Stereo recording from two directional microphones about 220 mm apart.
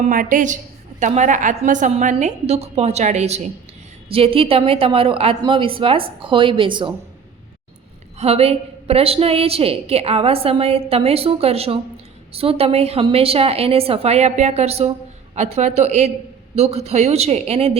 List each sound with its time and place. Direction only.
0.0 s a woman's voice: 40° right (ahead or behind); by 6.9 s 20° right (ahead or behind)
8.2 s a woman's voice: 30° right (ahead or behind)